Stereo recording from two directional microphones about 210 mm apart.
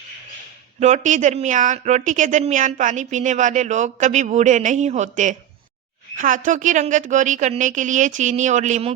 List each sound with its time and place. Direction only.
0.8 s speech: 35° right (ahead or behind)